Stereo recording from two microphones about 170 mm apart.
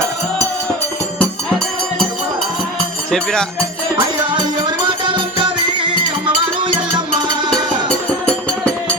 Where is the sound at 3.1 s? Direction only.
5° left (ahead or behind).